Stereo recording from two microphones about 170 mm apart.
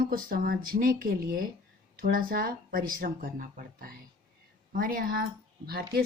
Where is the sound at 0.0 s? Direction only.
55° right (ahead or behind).